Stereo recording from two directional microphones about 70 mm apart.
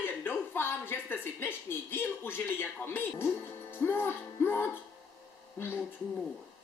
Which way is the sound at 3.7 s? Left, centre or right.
Left.